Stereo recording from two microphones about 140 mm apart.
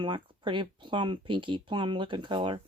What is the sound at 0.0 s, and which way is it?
Speech, 35° right (ahead or behind).